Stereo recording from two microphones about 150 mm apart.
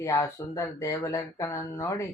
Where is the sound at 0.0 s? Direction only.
20° left (ahead or behind).